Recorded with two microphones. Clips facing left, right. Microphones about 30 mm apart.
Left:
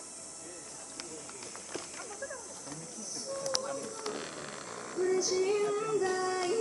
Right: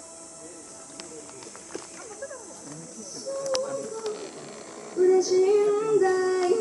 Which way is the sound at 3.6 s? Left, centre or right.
Centre.